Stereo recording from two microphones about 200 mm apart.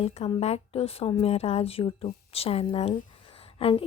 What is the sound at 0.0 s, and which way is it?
Speech, 30° left (ahead or behind).